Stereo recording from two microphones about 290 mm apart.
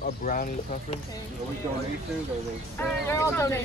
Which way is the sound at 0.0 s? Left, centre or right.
Left.